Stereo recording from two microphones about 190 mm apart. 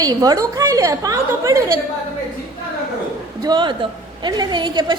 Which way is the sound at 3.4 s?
25° right (ahead or behind).